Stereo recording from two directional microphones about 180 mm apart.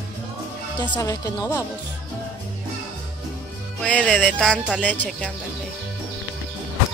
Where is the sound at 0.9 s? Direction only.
20° left (ahead or behind).